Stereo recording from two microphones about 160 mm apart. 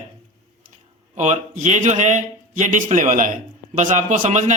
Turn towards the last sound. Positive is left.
turn(degrees=-50)  # may be behind; listen again after turning